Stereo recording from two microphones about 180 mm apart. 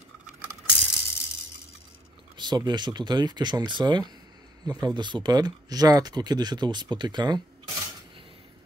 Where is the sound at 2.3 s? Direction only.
25° right (ahead or behind).